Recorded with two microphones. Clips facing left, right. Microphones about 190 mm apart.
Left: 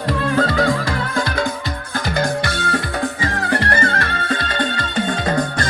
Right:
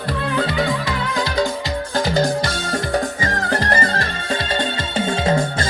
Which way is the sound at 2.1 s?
60° left (ahead or behind).